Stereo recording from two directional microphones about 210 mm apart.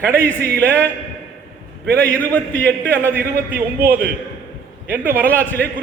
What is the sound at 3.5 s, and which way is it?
Speech, 10° right (ahead or behind).